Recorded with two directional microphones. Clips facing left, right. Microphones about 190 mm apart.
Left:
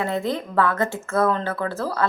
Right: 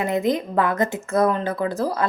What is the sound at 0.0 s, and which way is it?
Speech, 20° right (ahead or behind).